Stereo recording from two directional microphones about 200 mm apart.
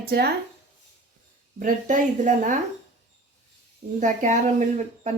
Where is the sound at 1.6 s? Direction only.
40° right (ahead or behind).